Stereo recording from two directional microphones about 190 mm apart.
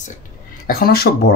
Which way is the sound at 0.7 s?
50° left (ahead or behind).